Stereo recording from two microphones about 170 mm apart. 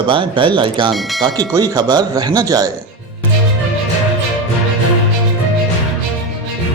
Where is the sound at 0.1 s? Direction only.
30° right (ahead or behind).